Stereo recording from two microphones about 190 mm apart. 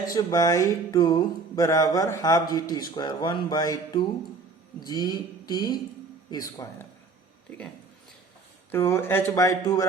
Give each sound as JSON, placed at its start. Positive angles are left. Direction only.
{"t": 0.0, "sound": "music", "side_deg": 20}
{"t": 7.5, "sound": "a sound", "side_deg": 5}
{"t": 8.7, "sound": "speech", "side_deg": 10}